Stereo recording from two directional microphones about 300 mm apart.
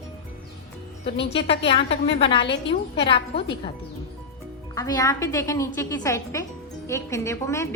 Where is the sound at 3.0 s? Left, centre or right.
Centre.